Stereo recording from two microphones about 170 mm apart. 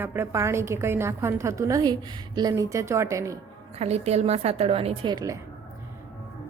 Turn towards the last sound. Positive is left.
turn(degrees=-25)  # may be behind; listen again after turning